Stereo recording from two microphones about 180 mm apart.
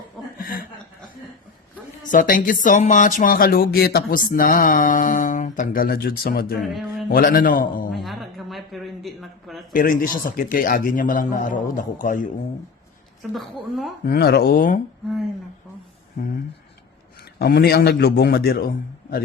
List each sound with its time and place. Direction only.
0.3 s chuckle: 50° left (ahead or behind)
2.0 s speech: 50° left (ahead or behind)
6.6 s a woman's voice: centre (ahead or behind)
7.1 s speech: 50° left (ahead or behind)
7.9 s a sound: centre (ahead or behind)
9.7 s speech: 50° left (ahead or behind)
13.3 s a woman's voice: centre (ahead or behind)
14.0 s a man's voice: 60° left (ahead or behind)
16.2 s a sound: 45° left (ahead or behind)
17.4 s a man's voice: 65° left (ahead or behind)